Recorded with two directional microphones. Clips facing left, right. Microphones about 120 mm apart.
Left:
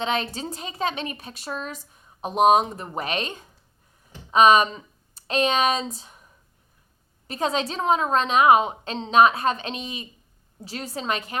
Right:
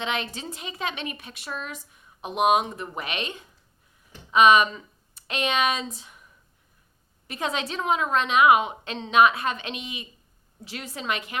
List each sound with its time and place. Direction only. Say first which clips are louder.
0.0 s speech: left 4 dB; 35° left (ahead or behind)